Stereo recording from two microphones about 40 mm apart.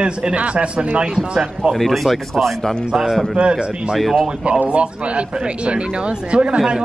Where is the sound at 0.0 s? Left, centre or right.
Right.